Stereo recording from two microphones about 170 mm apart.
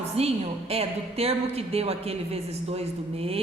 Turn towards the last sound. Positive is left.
turn(degrees=-35)  # may be behind; listen again after turning